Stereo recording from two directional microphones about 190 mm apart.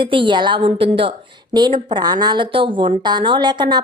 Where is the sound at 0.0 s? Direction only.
25° right (ahead or behind).